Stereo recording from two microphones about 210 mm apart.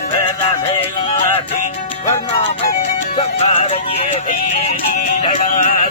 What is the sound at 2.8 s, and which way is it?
Music, 30° left (ahead or behind).